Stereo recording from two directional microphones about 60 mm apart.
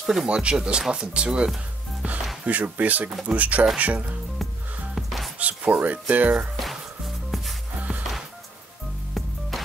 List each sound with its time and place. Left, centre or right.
0.0 s speech: centre
0.4 s speech: centre
4.4 s music: centre
5.4 s speech: right
6.5 s music: centre
9.2 s music: centre